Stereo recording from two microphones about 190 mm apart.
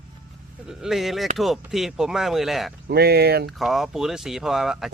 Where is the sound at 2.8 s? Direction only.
55° right (ahead or behind).